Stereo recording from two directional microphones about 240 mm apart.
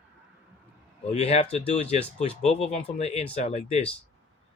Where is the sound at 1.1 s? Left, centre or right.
Left.